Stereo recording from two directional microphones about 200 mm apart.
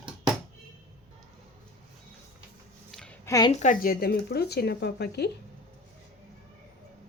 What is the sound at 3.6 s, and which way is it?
Speech, 45° left (ahead or behind).